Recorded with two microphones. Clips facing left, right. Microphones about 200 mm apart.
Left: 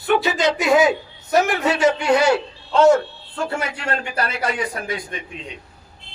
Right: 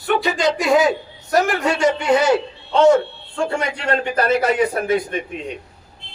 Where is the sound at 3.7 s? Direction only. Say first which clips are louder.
Right 5 dB; 35° right (ahead or behind).